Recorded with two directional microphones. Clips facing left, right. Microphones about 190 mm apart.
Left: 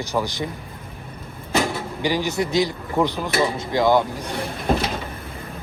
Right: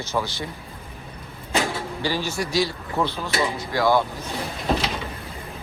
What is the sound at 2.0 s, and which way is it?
Speech, 15° left (ahead or behind).